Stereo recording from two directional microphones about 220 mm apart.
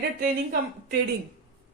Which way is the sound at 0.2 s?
40° right (ahead or behind).